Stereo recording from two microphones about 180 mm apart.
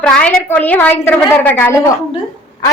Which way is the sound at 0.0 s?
5° left (ahead or behind).